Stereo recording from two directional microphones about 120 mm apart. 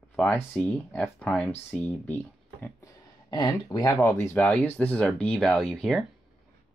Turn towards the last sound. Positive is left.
turn(degrees=0)  # may be behind; listen again after turning